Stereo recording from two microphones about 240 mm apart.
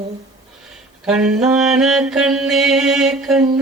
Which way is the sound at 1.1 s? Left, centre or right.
Centre.